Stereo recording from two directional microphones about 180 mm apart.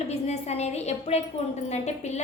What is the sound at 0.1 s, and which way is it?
A woman's voice, 40° left (ahead or behind).